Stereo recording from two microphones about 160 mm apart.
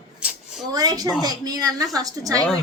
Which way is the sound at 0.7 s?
25° right (ahead or behind).